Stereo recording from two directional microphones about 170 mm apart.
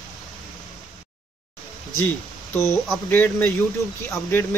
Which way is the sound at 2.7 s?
10° left (ahead or behind).